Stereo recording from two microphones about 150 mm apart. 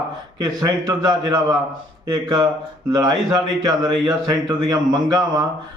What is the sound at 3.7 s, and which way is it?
A man's voice, 25° right (ahead or behind).